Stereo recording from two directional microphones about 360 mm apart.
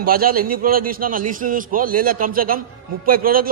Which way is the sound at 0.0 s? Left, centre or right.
Right.